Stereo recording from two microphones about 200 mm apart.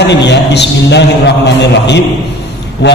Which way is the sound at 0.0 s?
60° left (ahead or behind).